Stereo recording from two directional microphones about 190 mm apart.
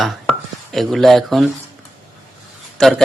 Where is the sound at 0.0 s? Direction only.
Centre (ahead or behind).